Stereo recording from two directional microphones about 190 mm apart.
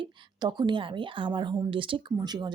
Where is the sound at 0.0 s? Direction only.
25° right (ahead or behind).